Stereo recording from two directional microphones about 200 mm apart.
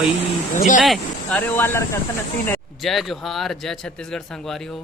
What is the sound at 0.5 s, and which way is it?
Speech, 40° left (ahead or behind).